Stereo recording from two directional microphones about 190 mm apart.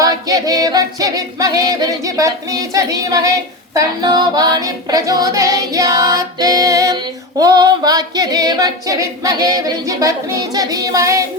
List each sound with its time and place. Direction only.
0.0 s singing: 20° right (ahead or behind)
3.8 s female singing: 20° right (ahead or behind)